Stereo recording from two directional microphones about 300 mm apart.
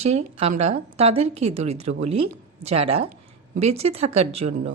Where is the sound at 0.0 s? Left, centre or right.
Right.